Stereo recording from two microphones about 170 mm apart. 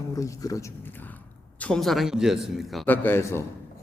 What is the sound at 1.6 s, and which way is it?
Speech, 5° left (ahead or behind).